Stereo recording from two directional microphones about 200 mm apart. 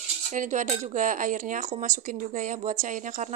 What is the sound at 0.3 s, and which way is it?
A woman's voice, 40° right (ahead or behind).